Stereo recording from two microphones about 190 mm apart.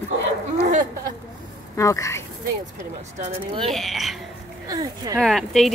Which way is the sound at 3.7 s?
Centre (ahead or behind).